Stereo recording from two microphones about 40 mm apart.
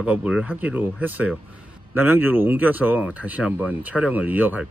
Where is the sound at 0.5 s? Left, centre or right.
Right.